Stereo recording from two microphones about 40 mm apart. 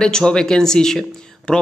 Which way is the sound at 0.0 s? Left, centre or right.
Centre.